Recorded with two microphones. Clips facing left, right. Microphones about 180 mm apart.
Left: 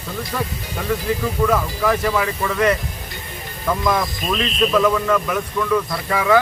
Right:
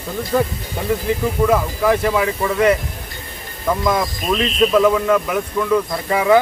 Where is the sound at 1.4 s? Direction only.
15° right (ahead or behind).